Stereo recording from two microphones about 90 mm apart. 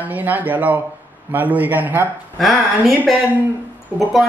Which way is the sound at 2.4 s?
Centre (ahead or behind).